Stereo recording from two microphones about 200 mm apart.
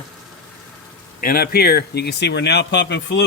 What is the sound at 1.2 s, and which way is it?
Speech, 50° left (ahead or behind).